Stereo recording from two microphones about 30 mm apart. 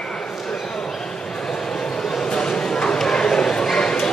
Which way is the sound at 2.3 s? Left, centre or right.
Left.